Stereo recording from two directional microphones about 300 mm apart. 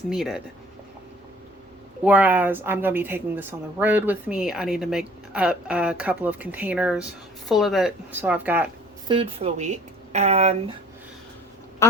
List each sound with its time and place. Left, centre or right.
0.1 s a woman's voice: centre
2.0 s a woman's voice: centre
9.1 s speech: centre